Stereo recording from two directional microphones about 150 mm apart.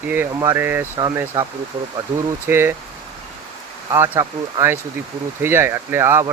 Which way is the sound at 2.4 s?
15° right (ahead or behind).